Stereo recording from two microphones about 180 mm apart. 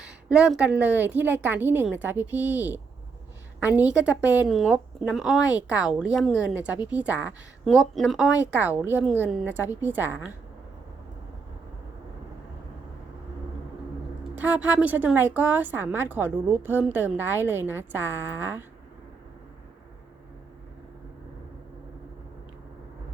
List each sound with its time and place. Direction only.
0.0 s a woman's voice: 5° right (ahead or behind)
5.4 s speech: 20° left (ahead or behind)
5.6 s a woman's voice: 5° right (ahead or behind)
14.3 s a woman's voice: 10° right (ahead or behind)